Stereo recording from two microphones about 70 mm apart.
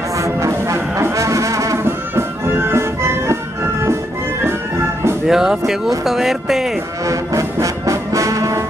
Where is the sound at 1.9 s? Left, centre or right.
Right.